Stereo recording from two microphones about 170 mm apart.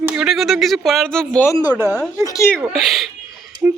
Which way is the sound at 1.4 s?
20° left (ahead or behind).